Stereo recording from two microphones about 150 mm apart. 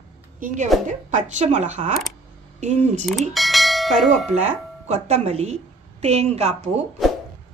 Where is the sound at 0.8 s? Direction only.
55° right (ahead or behind).